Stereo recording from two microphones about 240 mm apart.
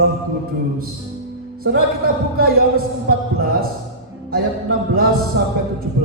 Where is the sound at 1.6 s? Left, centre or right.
Right.